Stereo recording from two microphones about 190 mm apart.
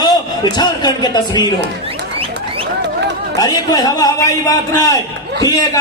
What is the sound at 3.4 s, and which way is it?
A man's voice, 20° left (ahead or behind).